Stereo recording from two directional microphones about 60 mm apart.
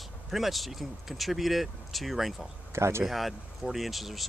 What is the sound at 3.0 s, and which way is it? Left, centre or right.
Speech, centre.